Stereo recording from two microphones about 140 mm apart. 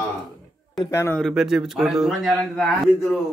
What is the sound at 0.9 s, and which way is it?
Speech, 15° left (ahead or behind).